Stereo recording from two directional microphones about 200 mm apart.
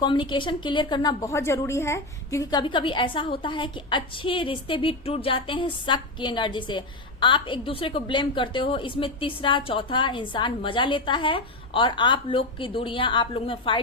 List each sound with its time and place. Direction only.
0.0 s a woman's voice: 25° left (ahead or behind)